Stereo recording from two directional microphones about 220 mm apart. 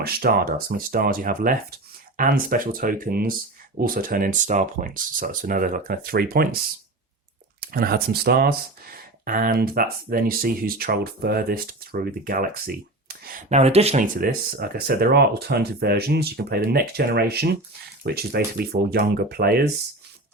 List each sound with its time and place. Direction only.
0.0 s speech: 45° right (ahead or behind)
7.6 s speech: 45° right (ahead or behind)